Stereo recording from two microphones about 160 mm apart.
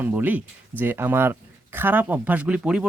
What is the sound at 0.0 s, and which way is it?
Speech, 10° right (ahead or behind).